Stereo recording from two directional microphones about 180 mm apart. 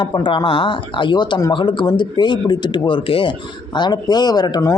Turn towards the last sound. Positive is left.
turn(degrees=20)  # may be behind; listen again after turning